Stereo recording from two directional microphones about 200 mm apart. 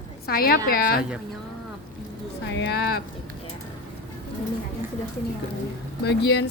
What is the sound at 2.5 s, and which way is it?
Speech, 55° left (ahead or behind).